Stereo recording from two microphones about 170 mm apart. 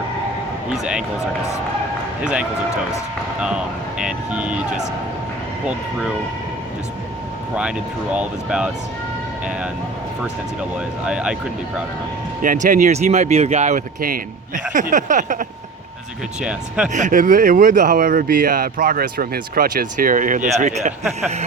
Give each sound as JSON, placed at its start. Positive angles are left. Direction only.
{"t": 2.2, "sound": "speech", "side_deg": -5}
{"t": 4.0, "sound": "speech", "side_deg": -5}
{"t": 7.5, "sound": "speech", "side_deg": -5}
{"t": 10.6, "sound": "speech", "side_deg": -5}
{"t": 12.4, "sound": "speech", "side_deg": -50}
{"t": 16.4, "sound": "speech", "side_deg": -5}
{"t": 16.9, "sound": "speech", "side_deg": -50}